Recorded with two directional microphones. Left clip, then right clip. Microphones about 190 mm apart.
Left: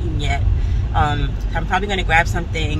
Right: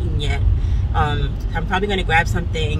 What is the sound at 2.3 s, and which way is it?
Speech, 10° right (ahead or behind).